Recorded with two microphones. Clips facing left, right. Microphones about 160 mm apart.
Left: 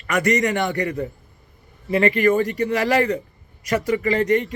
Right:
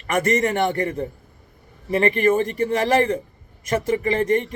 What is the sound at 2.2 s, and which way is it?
Speech, 25° right (ahead or behind).